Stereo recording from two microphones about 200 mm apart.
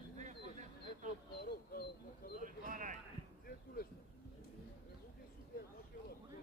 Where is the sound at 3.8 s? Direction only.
45° left (ahead or behind).